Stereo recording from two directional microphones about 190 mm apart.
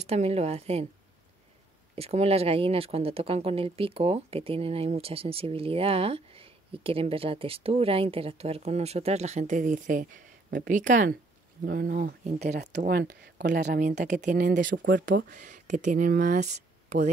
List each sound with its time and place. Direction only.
0.0 s speech: 35° right (ahead or behind)
2.0 s speech: 35° right (ahead or behind); by 13.7 s 60° right (ahead or behind)
14.0 s speech: 40° right (ahead or behind)